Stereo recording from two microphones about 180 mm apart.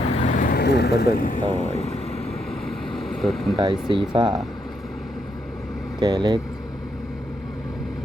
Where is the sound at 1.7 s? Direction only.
35° left (ahead or behind).